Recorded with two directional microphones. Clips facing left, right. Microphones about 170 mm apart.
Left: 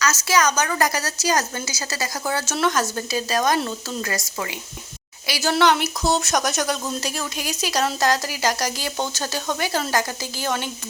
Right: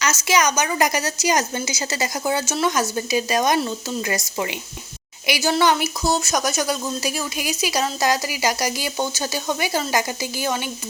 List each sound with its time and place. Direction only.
0.0 s speech: 15° right (ahead or behind)